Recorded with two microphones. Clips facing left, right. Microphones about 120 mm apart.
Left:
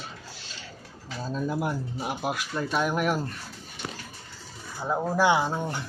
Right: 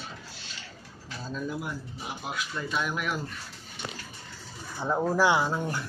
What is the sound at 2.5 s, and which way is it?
Speech, 45° left (ahead or behind).